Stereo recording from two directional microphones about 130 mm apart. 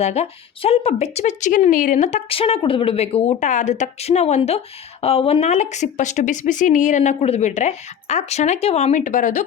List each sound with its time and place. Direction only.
0.0 s a woman's voice: 55° left (ahead or behind)
2.3 s a woman's voice: 45° left (ahead or behind); by 9.4 s 80° left